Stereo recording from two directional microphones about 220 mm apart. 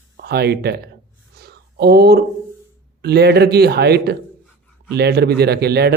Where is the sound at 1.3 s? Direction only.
45° right (ahead or behind).